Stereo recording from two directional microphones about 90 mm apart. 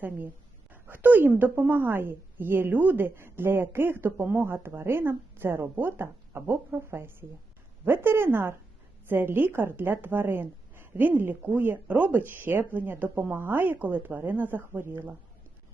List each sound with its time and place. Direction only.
0.7 s a woman's voice: 20° right (ahead or behind)